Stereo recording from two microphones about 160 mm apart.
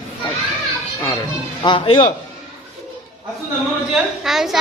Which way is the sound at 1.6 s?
35° left (ahead or behind).